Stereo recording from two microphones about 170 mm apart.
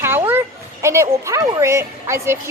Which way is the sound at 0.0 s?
15° right (ahead or behind).